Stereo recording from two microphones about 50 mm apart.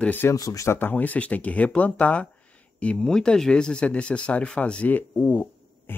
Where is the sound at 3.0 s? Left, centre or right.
Centre.